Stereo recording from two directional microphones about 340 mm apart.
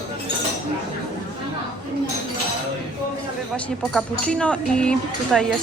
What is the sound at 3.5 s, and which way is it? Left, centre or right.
Speech, centre.